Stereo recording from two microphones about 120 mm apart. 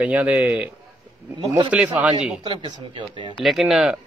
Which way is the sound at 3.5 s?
5° right (ahead or behind).